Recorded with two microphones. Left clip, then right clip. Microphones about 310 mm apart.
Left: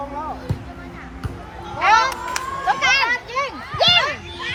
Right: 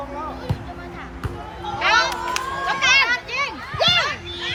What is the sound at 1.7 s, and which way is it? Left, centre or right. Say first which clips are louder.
Children playing: left 3 dB; centre.